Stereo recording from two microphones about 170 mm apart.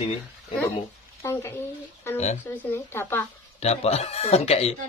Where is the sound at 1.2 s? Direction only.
15° left (ahead or behind).